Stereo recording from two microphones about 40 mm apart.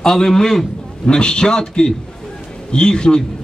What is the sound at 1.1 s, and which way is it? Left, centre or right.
A man's voice, left.